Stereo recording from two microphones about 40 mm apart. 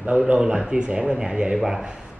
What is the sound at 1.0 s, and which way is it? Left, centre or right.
Speech, centre.